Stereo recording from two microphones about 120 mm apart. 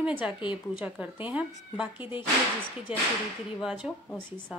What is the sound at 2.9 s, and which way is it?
Speech, 10° right (ahead or behind).